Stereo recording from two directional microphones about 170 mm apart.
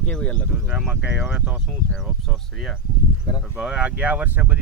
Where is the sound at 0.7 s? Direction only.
5° right (ahead or behind).